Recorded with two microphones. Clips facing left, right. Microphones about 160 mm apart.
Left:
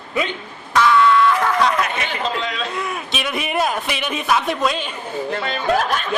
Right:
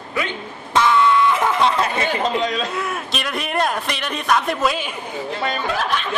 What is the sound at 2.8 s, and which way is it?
A man's voice, centre (ahead or behind).